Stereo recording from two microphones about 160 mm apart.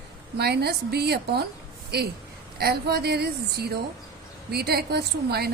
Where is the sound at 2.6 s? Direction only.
85° right.